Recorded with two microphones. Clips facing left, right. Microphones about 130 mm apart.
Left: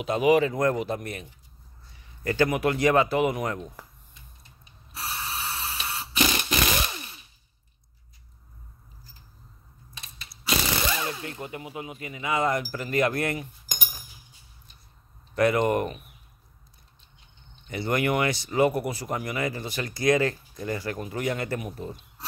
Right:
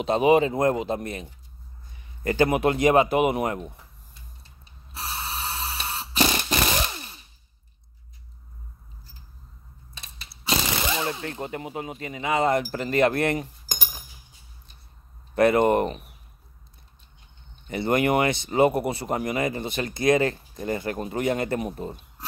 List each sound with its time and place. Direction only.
0.0 s a man's voice: 30° right (ahead or behind)
4.9 s a sound: 30° right (ahead or behind)
9.9 s crack: 30° right (ahead or behind)
10.4 s a sound: 30° right (ahead or behind)
11.3 s speech: 35° right (ahead or behind)
13.2 s cutlery: 30° right (ahead or behind)
15.3 s speech: 25° right (ahead or behind)
17.6 s speech: 25° right (ahead or behind)